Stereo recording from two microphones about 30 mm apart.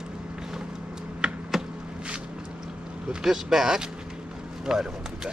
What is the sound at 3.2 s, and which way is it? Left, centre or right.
Speech, centre.